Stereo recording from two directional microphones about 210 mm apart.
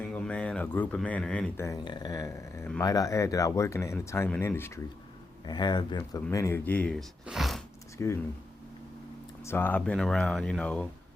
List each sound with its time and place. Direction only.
0.0 s speech: 5° left (ahead or behind)
7.9 s speech: 10° left (ahead or behind)
9.4 s speech: 10° left (ahead or behind)